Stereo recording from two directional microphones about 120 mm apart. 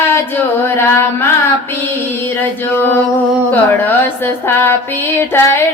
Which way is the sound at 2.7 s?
20° left (ahead or behind).